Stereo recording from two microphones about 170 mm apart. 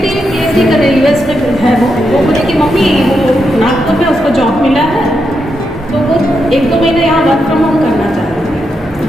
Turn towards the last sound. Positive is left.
turn(degrees=0)  # may be behind; listen again after turning